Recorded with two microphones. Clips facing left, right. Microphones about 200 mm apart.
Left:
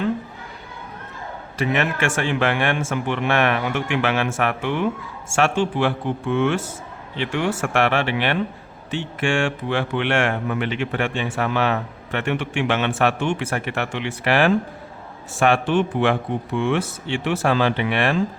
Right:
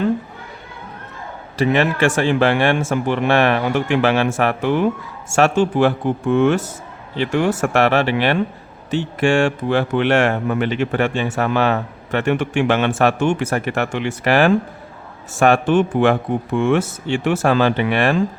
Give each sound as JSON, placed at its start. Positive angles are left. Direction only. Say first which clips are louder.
{"t": 1.5, "sound": "speech", "louder": "right 5 dB", "side_deg": -35}